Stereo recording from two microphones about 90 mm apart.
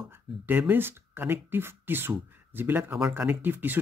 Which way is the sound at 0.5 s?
25° right (ahead or behind).